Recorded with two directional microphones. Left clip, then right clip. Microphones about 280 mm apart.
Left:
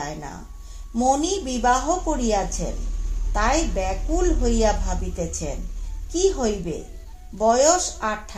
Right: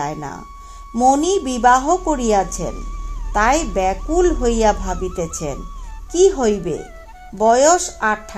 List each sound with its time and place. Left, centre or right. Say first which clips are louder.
0.9 s speech: right 6 dB; right